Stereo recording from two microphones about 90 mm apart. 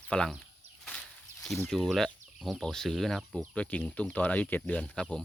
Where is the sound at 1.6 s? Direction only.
Centre (ahead or behind).